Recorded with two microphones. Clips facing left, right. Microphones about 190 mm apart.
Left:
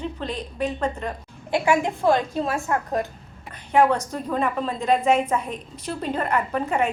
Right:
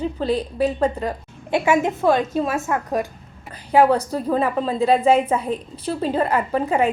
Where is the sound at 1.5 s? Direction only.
20° right (ahead or behind).